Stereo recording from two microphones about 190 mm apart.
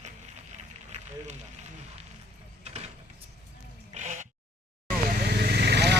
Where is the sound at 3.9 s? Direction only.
40° right (ahead or behind).